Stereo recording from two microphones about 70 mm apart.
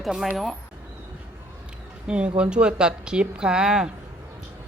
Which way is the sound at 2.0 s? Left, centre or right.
Centre.